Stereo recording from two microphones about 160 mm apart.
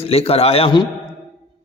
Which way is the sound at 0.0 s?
40° left (ahead or behind).